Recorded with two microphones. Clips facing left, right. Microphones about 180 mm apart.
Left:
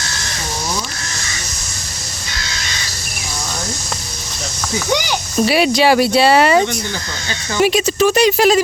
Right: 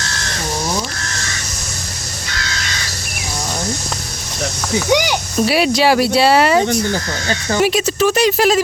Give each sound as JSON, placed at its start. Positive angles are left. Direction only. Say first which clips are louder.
{"t": 5.4, "sound": "speech", "louder": "left 1 dB", "side_deg": 0}
{"t": 6.7, "sound": "speech", "louder": "right 6 dB", "side_deg": -45}
{"t": 7.6, "sound": "speech", "louder": "left 2 dB", "side_deg": 0}